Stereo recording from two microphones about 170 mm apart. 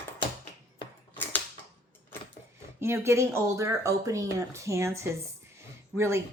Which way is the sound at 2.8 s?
15° right (ahead or behind).